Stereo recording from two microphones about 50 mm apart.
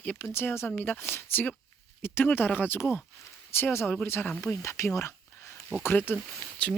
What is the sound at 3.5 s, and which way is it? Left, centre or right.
Speech, left.